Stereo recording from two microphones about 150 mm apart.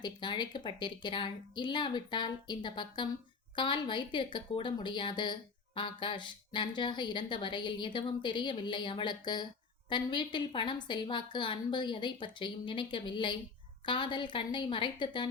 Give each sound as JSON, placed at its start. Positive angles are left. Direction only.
{"t": 0.0, "sound": "a woman's voice", "side_deg": 30}